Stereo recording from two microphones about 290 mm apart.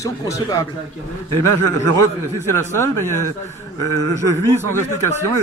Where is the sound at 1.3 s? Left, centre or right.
Right.